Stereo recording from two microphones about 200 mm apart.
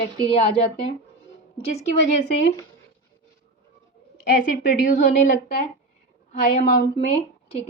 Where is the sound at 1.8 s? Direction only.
35° left (ahead or behind).